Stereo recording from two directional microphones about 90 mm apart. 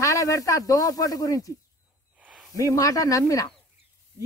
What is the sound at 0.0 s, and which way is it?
Speech, 35° left (ahead or behind).